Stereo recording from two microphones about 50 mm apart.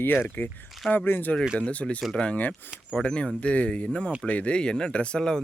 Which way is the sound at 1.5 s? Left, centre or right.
Left.